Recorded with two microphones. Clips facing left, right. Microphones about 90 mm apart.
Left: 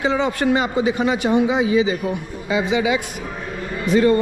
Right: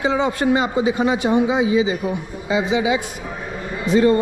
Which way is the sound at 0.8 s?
25° right (ahead or behind).